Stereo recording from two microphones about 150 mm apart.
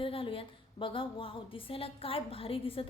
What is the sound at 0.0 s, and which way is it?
A woman's voice, 35° left (ahead or behind).